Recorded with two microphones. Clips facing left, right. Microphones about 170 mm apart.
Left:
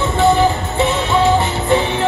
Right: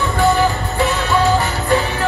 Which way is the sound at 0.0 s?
20° left (ahead or behind).